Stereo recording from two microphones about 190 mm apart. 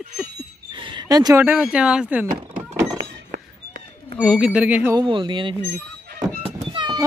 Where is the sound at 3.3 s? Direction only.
55° right (ahead or behind).